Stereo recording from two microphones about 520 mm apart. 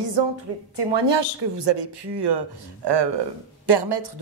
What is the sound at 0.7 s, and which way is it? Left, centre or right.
Speech, right.